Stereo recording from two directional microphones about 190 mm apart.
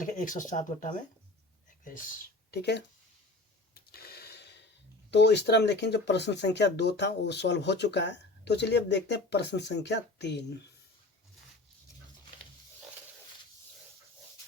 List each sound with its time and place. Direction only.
0.0 s speech: 45° left (ahead or behind)
2.5 s speech: 60° left (ahead or behind)
3.8 s a sound: 55° left (ahead or behind)
5.1 s speech: 60° left (ahead or behind)